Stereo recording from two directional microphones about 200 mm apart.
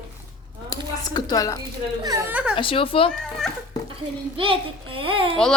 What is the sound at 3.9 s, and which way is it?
A child's voice, 25° right (ahead or behind).